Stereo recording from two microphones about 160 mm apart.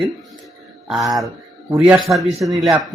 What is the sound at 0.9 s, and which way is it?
Speech, centre (ahead or behind).